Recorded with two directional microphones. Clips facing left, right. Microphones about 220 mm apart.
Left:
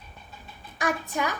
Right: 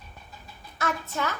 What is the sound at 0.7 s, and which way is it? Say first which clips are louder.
Speech: left 2 dB; 15° left (ahead or behind).